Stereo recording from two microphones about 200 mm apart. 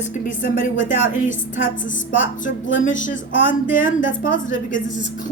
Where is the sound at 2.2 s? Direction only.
40° left (ahead or behind).